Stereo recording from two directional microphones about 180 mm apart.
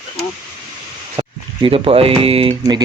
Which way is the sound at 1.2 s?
35° right (ahead or behind).